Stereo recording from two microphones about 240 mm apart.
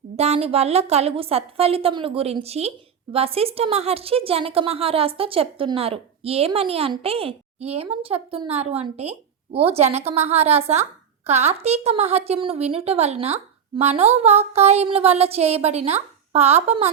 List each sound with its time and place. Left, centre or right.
0.2 s a woman's voice: right